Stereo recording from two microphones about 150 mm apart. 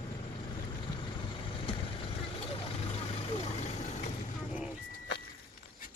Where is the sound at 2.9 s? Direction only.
45° left (ahead or behind).